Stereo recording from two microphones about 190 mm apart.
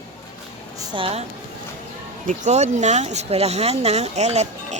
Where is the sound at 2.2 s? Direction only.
40° right (ahead or behind).